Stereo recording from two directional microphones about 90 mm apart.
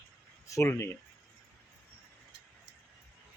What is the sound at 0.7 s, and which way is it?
Speech, 25° left (ahead or behind).